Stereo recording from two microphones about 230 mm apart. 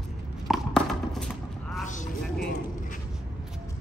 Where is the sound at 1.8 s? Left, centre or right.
Left.